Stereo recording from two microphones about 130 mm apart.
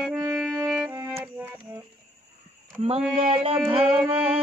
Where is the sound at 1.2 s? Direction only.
15° right (ahead or behind).